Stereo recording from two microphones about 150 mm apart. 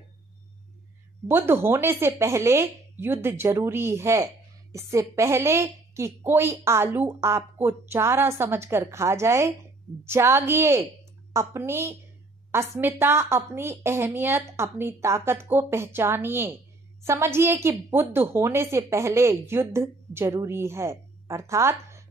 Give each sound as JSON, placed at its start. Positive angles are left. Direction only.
{"t": 1.2, "sound": "a woman's voice", "side_deg": -15}